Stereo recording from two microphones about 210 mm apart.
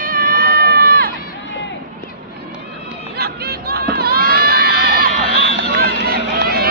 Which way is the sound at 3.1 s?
50° right (ahead or behind).